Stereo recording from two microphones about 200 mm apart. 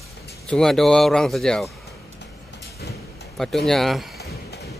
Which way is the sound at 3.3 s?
Centre (ahead or behind).